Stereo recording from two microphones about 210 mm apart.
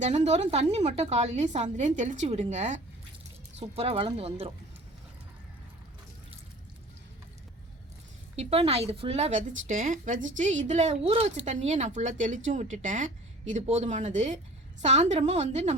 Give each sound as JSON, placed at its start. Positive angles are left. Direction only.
{"t": 0.0, "sound": "a woman's voice", "side_deg": -35}
{"t": 8.4, "sound": "a woman's voice", "side_deg": -25}